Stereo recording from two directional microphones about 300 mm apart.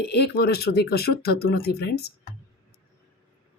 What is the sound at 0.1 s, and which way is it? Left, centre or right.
Speech, left.